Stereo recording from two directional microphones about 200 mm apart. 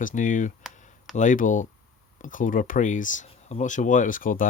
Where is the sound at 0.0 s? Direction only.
40° left (ahead or behind).